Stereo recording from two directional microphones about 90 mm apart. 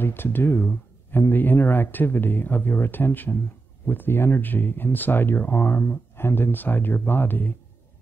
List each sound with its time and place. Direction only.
0.0 s speech: 25° left (ahead or behind)